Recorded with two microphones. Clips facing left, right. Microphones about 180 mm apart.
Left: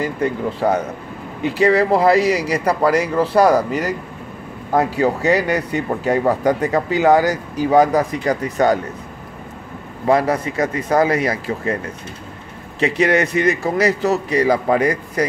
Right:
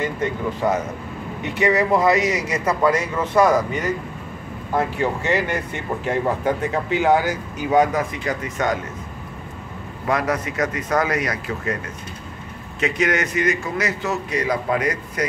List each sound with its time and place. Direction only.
0.0 s a man's voice: 35° left (ahead or behind)
10.0 s a man's voice: 30° left (ahead or behind)
12.8 s a man's voice: 35° left (ahead or behind)